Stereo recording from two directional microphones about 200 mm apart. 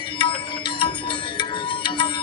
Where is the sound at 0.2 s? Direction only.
25° left (ahead or behind).